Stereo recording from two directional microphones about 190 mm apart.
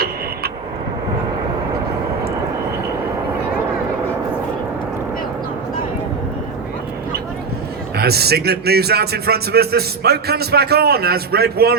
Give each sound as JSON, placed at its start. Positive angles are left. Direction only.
{"t": 7.9, "sound": "speech", "side_deg": -55}